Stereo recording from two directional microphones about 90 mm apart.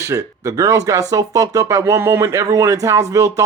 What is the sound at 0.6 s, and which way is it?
Speech, 35° right (ahead or behind).